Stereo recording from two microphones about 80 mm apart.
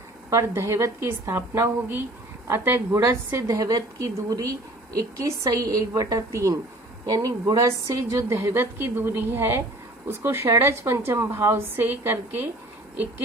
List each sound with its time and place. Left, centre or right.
0.3 s a woman's voice: right